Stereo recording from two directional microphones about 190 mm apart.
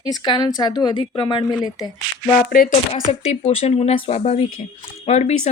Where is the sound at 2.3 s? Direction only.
45° left (ahead or behind).